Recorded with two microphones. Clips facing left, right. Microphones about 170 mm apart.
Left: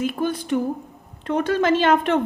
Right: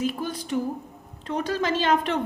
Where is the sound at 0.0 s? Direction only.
60° left (ahead or behind).